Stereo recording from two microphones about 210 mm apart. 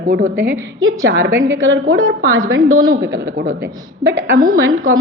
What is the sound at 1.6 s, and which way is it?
A woman's voice, 75° right (ahead or behind).